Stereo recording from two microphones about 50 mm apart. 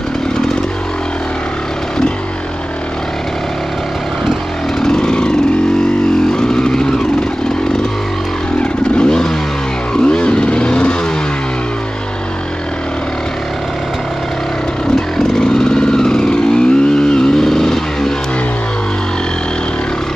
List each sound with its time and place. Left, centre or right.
4.7 s vehicle: centre
8.9 s vehicle: centre
15.0 s vehicle: centre